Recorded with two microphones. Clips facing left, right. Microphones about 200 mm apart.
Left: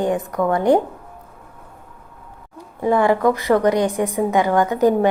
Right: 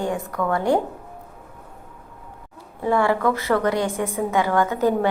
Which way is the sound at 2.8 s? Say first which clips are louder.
Left 4 dB; 15° left (ahead or behind).